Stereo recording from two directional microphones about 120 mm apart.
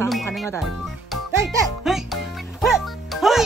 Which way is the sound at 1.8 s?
Centre (ahead or behind).